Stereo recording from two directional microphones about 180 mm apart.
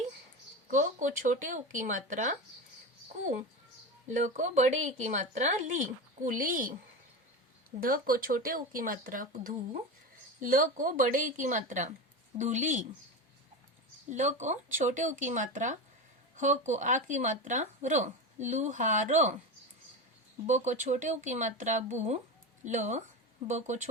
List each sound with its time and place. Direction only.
0.7 s speech: 45° right (ahead or behind)
4.1 s a woman's voice: 40° right (ahead or behind)
7.8 s speech: 50° right (ahead or behind)
14.1 s speech: 40° right (ahead or behind)
20.5 s a woman's voice: 45° right (ahead or behind)